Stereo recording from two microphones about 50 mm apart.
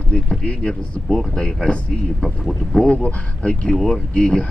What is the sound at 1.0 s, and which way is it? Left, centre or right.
Speech, centre.